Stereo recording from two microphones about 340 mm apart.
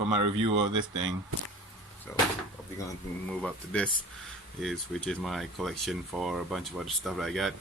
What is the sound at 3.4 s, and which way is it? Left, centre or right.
Speech, centre.